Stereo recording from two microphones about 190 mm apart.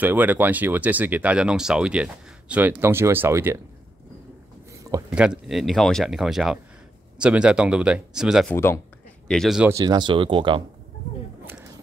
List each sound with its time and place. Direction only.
0.0 s speech: 10° right (ahead or behind)
5.1 s speech: 5° right (ahead or behind)
8.5 s speech: 15° left (ahead or behind)
9.3 s speech: centre (ahead or behind)
9.7 s speech: 20° right (ahead or behind)